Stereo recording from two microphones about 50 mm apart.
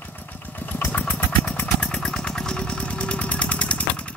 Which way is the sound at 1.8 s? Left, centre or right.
Centre.